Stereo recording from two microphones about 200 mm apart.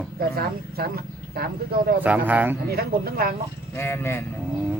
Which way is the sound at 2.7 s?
50° right (ahead or behind).